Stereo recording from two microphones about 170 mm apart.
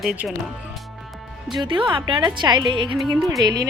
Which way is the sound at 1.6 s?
30° right (ahead or behind).